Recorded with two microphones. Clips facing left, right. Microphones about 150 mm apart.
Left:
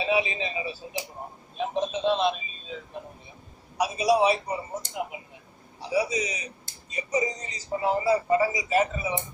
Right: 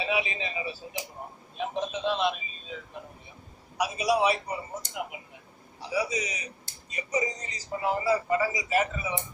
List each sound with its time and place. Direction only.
0.0 s a man's voice: 25° left (ahead or behind)